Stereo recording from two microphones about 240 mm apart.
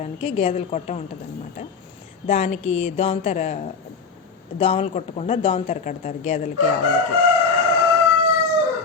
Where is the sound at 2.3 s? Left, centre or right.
Left.